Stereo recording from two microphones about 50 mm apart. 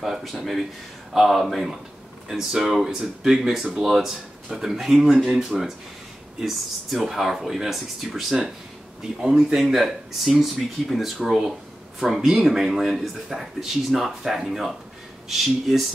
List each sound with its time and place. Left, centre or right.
0.0 s speech: centre
6.4 s speech: centre